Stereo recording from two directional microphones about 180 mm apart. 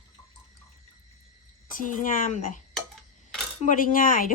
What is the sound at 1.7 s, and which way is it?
Speech, 45° left (ahead or behind).